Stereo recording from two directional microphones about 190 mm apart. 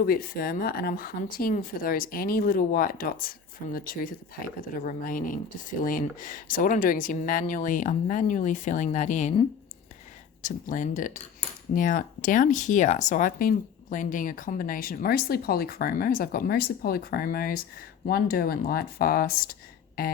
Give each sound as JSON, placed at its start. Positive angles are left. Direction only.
{"t": 0.0, "sound": "speech", "side_deg": 50}
{"t": 10.4, "sound": "speech", "side_deg": 45}